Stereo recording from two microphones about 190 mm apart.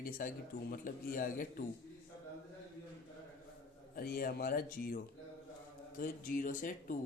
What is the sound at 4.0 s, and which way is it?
Speech, 50° left (ahead or behind).